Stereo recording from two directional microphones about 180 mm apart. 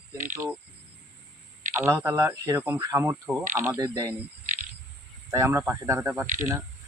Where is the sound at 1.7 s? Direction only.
10° right (ahead or behind).